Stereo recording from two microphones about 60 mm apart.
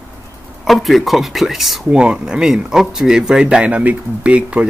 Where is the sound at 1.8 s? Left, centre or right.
Centre.